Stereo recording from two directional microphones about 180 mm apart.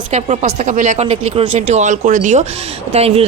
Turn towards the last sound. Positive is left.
turn(degrees=-35)  # may be behind; listen again after turning